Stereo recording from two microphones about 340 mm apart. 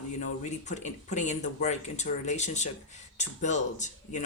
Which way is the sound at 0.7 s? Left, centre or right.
Left.